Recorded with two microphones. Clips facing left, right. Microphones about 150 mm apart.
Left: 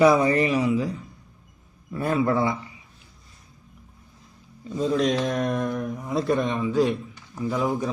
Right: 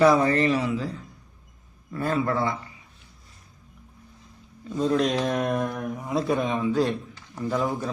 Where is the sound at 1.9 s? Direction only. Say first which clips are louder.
Left 2 dB; 20° left (ahead or behind).